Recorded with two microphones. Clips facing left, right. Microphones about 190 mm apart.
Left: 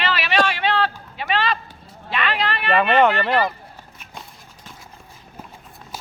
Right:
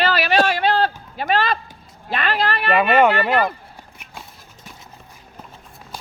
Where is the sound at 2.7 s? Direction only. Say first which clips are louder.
Right 1 dB; 10° right (ahead or behind).